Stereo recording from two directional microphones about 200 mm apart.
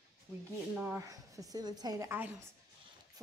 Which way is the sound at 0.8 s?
10° right (ahead or behind).